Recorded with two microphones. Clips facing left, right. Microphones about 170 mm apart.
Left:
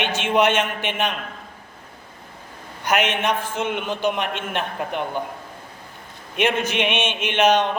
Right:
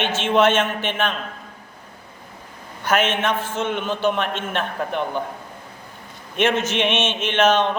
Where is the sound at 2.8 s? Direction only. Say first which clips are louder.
Right 1 dB; 15° left (ahead or behind).